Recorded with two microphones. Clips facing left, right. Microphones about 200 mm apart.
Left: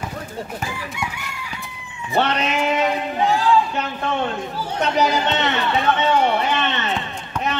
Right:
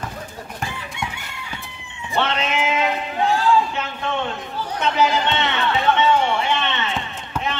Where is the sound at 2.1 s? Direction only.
40° left (ahead or behind).